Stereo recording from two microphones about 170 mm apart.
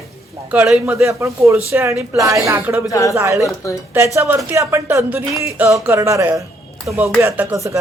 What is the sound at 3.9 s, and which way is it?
Speech, 15° right (ahead or behind).